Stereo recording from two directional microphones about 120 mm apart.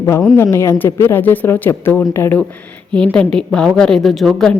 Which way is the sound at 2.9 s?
5° left (ahead or behind).